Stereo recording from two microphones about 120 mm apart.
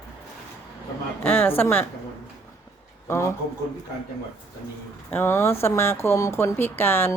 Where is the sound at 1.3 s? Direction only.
15° left (ahead or behind).